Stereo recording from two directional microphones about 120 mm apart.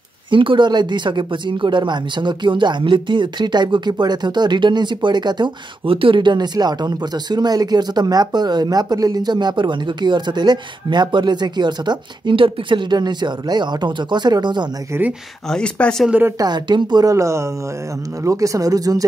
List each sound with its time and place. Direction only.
0.3 s speech: 45° right (ahead or behind)
14.9 s speech: 15° right (ahead or behind)
15.4 s speech: 5° left (ahead or behind)
16.1 s speech: 15° right (ahead or behind)
16.3 s speech: 35° right (ahead or behind)